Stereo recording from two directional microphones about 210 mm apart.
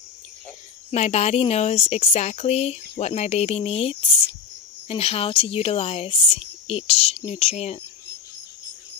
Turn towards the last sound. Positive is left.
turn(degrees=30)  # may be behind; listen again after turning